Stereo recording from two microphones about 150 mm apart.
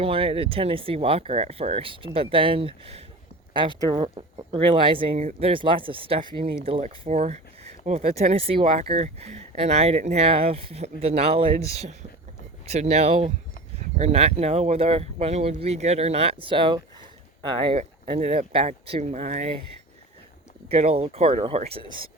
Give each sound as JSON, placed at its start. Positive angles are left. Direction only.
{"t": 0.0, "sound": "speech", "side_deg": -40}
{"t": 3.8, "sound": "speech", "side_deg": -25}
{"t": 4.1, "sound": "speech", "side_deg": -35}
{"t": 7.1, "sound": "speech", "side_deg": -50}
{"t": 20.7, "sound": "speech", "side_deg": -45}